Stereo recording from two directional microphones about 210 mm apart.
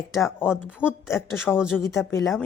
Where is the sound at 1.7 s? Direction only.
15° left (ahead or behind).